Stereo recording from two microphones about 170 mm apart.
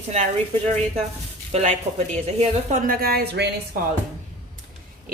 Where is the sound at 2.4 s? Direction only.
45° right (ahead or behind); by 3.5 s 75° right (ahead or behind).